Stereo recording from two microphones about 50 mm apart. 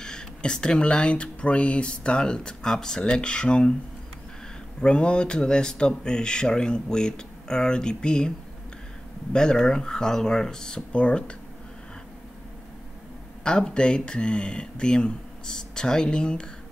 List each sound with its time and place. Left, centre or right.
0.0 s speech: centre
4.8 s speech: centre
9.3 s speech: centre
13.4 s speech: centre